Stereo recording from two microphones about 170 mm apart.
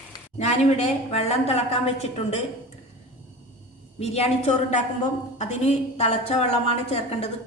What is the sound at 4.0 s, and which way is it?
Speech, 35° left (ahead or behind).